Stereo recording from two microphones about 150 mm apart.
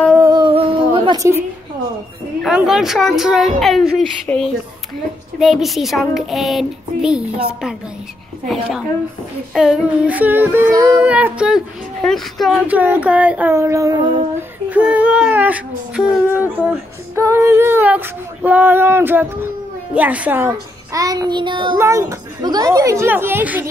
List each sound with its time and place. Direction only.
0.2 s a sound: 30° right (ahead or behind)
2.4 s a child's voice: 5° right (ahead or behind)
5.4 s a child's voice: centre (ahead or behind)
9.5 s female singing: centre (ahead or behind)
12.0 s a child's voice: centre (ahead or behind)
12.6 s female singing: 10° right (ahead or behind)
14.7 s female singing: 10° right (ahead or behind); by 21.7 s 30° right (ahead or behind)
21.7 s speech: 20° right (ahead or behind)